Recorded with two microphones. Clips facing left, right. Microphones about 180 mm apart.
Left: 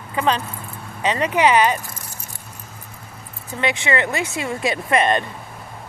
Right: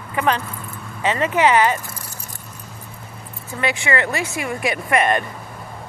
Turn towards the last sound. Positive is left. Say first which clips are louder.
# even
turn(degrees=25)  # may be behind; listen again after turning